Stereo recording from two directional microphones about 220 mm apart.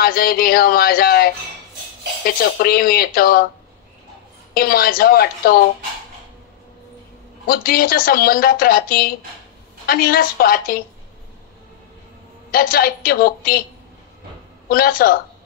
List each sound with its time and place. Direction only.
0.0 s speech: 40° left (ahead or behind)
4.6 s speech: 40° left (ahead or behind)
7.4 s a woman's voice: 40° left (ahead or behind)
12.4 s a woman's voice: 40° left (ahead or behind)
14.7 s a woman's voice: 40° left (ahead or behind)